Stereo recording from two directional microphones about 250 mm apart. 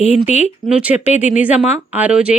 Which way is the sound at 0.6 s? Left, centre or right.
Centre.